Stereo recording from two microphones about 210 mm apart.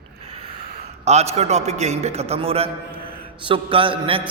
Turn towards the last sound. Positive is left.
turn(degrees=-25)  # may be behind; listen again after turning